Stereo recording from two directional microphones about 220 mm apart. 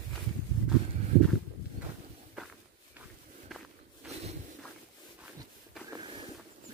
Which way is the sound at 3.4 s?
Centre (ahead or behind).